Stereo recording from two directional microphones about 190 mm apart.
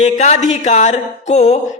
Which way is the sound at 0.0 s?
35° left (ahead or behind).